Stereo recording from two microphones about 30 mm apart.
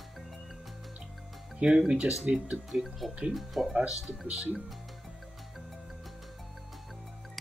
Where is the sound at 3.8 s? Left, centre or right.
Right.